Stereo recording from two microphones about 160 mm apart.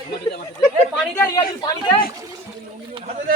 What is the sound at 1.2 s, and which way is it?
Speech, 20° left (ahead or behind).